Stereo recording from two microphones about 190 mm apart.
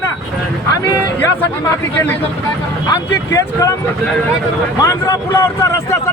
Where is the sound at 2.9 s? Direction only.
15° left (ahead or behind).